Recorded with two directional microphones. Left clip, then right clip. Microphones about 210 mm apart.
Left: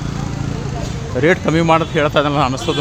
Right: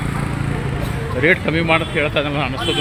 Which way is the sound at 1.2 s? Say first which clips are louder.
Left 2 dB; 25° left (ahead or behind).